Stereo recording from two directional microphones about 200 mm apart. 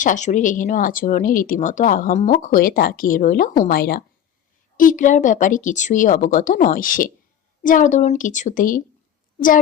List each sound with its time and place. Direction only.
0.0 s speech: 40° left (ahead or behind)